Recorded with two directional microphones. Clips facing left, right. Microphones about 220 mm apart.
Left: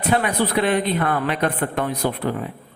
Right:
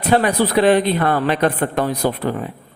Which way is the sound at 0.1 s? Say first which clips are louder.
Right 6 dB; 35° right (ahead or behind).